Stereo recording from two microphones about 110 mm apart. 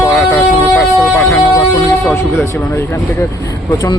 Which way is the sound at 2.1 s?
25° left (ahead or behind).